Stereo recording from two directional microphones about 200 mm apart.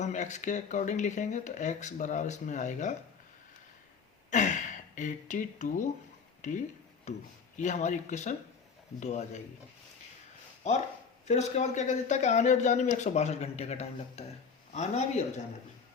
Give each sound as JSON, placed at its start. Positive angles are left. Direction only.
{"t": 0.0, "sound": "speech", "side_deg": 35}
{"t": 4.3, "sound": "speech", "side_deg": 40}
{"t": 11.3, "sound": "speech", "side_deg": 35}